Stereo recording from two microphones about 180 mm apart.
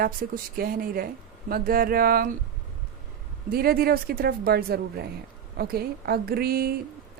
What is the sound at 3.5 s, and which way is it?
Speech, 55° right (ahead or behind).